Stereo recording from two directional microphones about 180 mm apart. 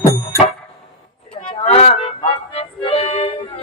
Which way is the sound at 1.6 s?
35° left (ahead or behind).